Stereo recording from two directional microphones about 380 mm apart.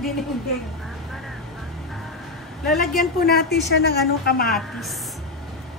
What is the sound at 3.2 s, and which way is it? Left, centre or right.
A woman's voice, left.